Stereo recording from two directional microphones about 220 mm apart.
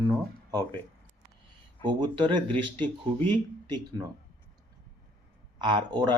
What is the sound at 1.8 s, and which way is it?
Speech, 20° right (ahead or behind).